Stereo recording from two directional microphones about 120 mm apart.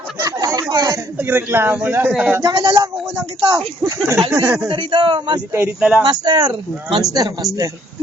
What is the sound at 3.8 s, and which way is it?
Speech, 30° right (ahead or behind).